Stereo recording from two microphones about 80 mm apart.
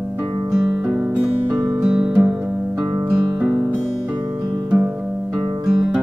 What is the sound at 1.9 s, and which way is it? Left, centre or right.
Music, centre.